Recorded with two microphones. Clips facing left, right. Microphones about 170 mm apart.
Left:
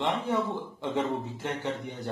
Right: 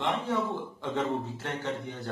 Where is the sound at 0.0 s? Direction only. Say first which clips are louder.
Left 1 dB; 15° left (ahead or behind).